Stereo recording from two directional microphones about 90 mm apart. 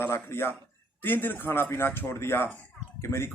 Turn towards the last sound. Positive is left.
turn(degrees=30)  # may be behind; listen again after turning